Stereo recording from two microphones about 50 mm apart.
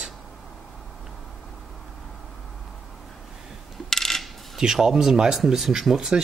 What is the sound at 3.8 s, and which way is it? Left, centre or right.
Coin, centre.